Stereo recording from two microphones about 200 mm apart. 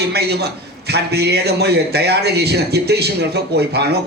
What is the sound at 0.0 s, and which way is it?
A man's voice, 55° right (ahead or behind).